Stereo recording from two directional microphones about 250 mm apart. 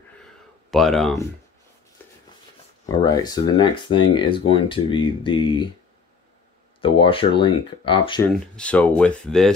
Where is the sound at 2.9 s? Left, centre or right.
Centre.